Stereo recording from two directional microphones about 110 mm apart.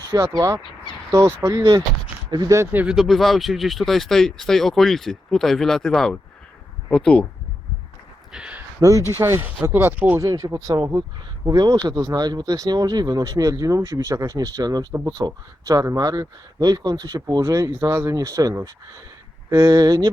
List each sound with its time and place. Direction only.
0.1 s speech: 30° right (ahead or behind)
2.8 s speech: 5° right (ahead or behind)
8.3 s a sound: 10° right (ahead or behind)
8.8 s speech: 30° right (ahead or behind)
10.2 s speech: 30° right (ahead or behind)